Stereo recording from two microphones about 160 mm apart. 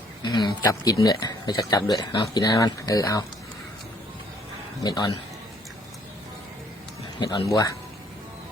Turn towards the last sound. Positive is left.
turn(degrees=25)  # may be behind; listen again after turning